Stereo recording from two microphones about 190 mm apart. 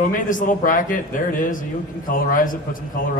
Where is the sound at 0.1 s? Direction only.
45° left (ahead or behind).